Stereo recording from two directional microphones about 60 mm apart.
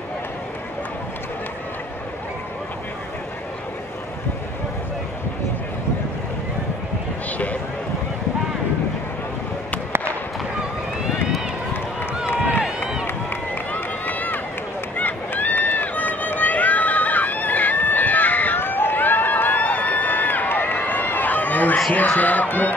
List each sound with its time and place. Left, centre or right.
12.6 s run: centre
13.7 s run: left
21.9 s a sound: left